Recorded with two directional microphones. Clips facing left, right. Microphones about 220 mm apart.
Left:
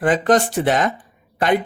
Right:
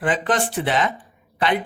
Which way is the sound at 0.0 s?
45° left (ahead or behind).